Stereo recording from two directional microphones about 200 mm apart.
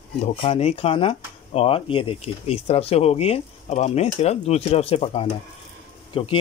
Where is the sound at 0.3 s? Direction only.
30° left (ahead or behind).